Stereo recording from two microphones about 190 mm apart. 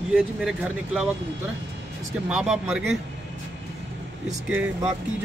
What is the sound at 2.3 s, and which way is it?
Speech, 5° right (ahead or behind).